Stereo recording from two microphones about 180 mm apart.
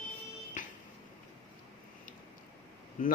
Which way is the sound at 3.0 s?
45° left (ahead or behind).